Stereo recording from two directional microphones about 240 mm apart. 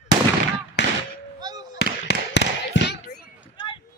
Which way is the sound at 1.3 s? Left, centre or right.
Centre.